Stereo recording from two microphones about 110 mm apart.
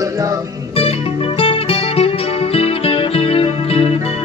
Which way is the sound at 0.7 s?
60° left (ahead or behind).